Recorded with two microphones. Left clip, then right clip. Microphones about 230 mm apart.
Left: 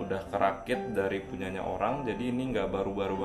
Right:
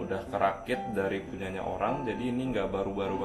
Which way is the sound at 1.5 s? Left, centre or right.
Left.